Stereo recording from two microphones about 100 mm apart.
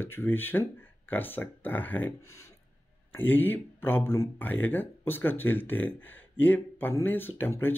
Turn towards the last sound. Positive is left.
turn(degrees=20)  # may be behind; listen again after turning